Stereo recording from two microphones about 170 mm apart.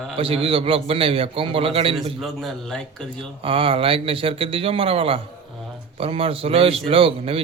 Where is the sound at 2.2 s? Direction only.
Centre (ahead or behind).